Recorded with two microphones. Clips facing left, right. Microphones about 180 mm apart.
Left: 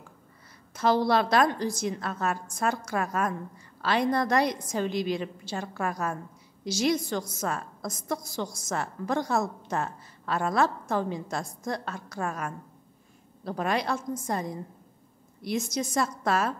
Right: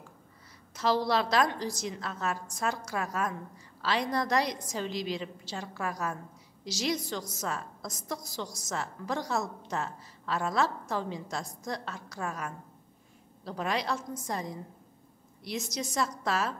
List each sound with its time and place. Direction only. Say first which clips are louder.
0.7 s a woman's voice: left 4 dB; 55° left (ahead or behind)